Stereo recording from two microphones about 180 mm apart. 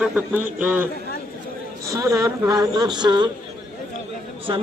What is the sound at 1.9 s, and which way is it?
Speech, 20° right (ahead or behind).